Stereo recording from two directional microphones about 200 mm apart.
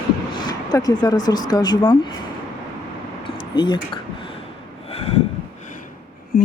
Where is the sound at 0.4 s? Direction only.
20° left (ahead or behind).